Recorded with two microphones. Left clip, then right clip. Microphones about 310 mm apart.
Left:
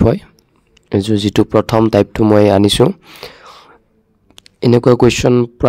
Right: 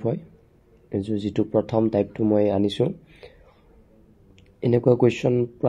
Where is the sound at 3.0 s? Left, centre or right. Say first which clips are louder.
Left 15 dB; left.